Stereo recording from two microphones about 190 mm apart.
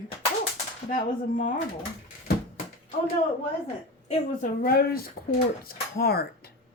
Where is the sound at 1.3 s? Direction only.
45° left (ahead or behind).